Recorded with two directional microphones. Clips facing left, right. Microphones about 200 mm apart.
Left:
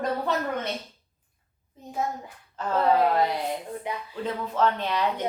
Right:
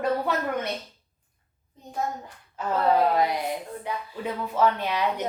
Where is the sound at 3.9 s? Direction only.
20° left (ahead or behind).